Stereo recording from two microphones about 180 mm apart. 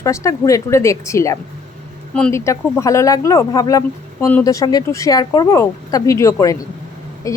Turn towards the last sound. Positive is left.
turn(degrees=20)  # may be behind; listen again after turning